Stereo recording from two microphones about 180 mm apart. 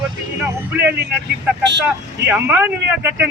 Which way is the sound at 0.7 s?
10° right (ahead or behind).